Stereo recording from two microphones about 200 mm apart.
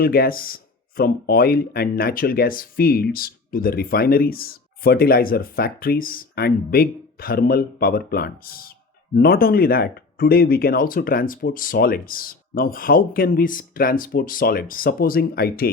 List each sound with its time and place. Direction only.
0.0 s speech: 50° left (ahead or behind)